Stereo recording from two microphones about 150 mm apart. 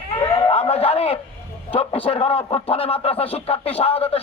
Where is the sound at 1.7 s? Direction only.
40° left (ahead or behind).